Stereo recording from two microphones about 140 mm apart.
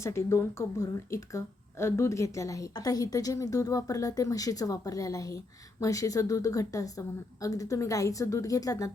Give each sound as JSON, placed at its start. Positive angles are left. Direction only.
{"t": 0.0, "sound": "speech", "side_deg": 20}